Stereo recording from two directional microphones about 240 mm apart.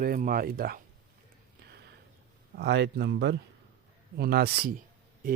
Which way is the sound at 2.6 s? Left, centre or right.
Right.